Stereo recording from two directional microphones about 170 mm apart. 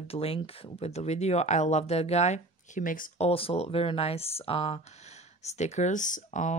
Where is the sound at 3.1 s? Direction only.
35° left (ahead or behind).